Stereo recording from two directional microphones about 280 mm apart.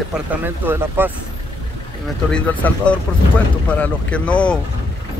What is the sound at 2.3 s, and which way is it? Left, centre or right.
Speech, centre.